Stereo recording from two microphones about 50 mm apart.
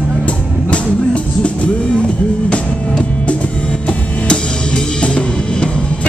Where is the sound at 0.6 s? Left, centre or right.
Left.